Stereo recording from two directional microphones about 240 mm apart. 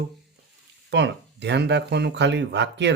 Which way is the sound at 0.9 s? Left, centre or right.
Right.